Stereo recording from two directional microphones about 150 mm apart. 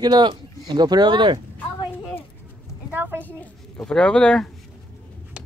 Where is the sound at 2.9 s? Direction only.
15° right (ahead or behind).